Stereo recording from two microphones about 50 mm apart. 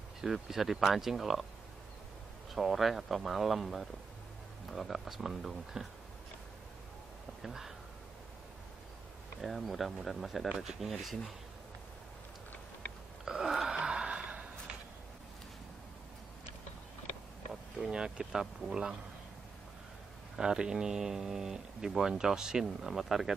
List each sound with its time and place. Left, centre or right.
0.2 s speech: centre
2.5 s speech: centre
7.4 s speech: centre
9.4 s speech: centre
13.2 s a sound: centre
13.7 s gasp: centre
17.9 s speech: centre
20.3 s speech: centre